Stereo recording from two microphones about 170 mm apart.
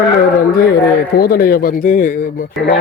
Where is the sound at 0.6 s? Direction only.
65° left (ahead or behind).